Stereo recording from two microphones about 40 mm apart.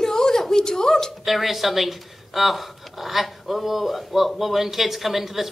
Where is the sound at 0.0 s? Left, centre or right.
Centre.